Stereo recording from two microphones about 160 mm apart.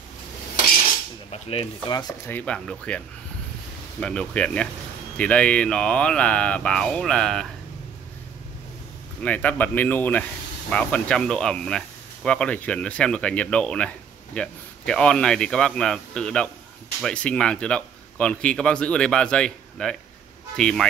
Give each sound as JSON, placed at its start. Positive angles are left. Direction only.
{"t": 1.3, "sound": "speech", "side_deg": 35}
{"t": 2.2, "sound": "speech", "side_deg": 10}
{"t": 4.0, "sound": "speech", "side_deg": 5}
{"t": 9.2, "sound": "speech", "side_deg": 10}